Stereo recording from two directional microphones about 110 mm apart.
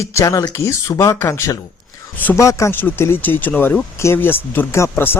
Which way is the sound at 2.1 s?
15° left (ahead or behind).